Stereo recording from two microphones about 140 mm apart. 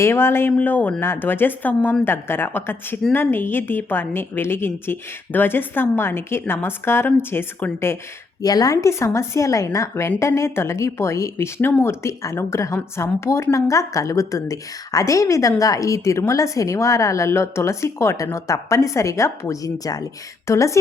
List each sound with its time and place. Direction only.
0.0 s a woman's voice: 15° left (ahead or behind)